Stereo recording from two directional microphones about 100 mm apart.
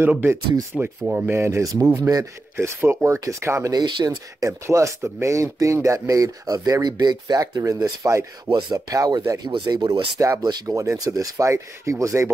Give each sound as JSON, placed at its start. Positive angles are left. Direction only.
{"t": 0.0, "sound": "speech", "side_deg": -20}
{"t": 2.5, "sound": "speech", "side_deg": -25}
{"t": 3.7, "sound": "speech", "side_deg": -45}
{"t": 4.4, "sound": "speech", "side_deg": -30}
{"t": 8.5, "sound": "speech", "side_deg": -50}